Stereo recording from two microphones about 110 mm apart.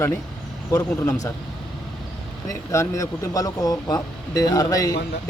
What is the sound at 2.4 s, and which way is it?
Speech, 25° left (ahead or behind).